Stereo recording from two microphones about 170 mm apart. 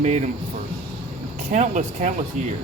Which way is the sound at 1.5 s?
45° right (ahead or behind).